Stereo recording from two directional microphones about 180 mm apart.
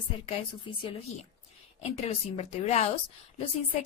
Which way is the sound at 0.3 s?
30° left (ahead or behind).